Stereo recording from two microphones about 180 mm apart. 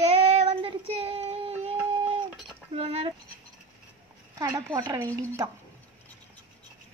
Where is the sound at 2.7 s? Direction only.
35° right (ahead or behind).